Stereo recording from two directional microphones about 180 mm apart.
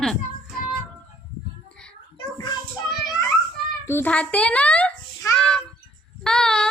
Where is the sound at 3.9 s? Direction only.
10° left (ahead or behind).